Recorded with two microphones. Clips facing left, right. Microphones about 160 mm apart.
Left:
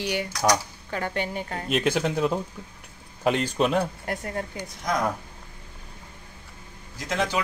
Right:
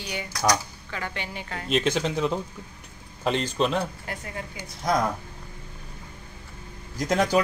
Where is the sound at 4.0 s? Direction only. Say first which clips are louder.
Left 5 dB; 45° left (ahead or behind).